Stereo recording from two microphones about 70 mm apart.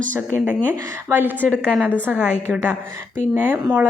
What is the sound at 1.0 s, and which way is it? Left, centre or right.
Speech, right.